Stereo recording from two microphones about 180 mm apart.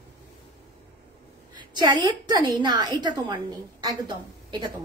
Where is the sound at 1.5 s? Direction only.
25° right (ahead or behind).